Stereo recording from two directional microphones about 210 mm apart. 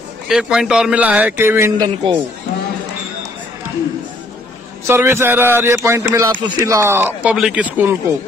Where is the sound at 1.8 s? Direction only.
25° right (ahead or behind).